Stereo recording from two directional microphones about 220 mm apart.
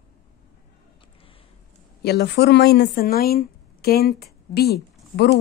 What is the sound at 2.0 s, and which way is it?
Speech, 50° left (ahead or behind).